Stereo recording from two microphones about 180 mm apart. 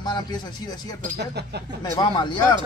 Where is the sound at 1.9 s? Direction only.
25° left (ahead or behind).